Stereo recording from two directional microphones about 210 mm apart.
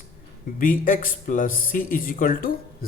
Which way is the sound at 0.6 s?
40° left (ahead or behind).